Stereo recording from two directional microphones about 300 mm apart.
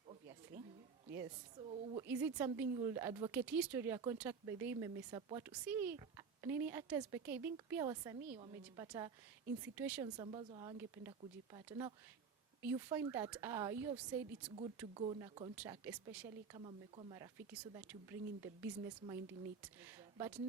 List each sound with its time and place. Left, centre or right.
0.5 s a sound: right
1.1 s a woman's voice: centre
1.7 s a woman's voice: centre
2.0 s a woman's voice: centre
14.9 s a woman's voice: centre